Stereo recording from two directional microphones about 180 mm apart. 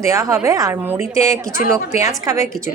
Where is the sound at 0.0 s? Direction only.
15° right (ahead or behind).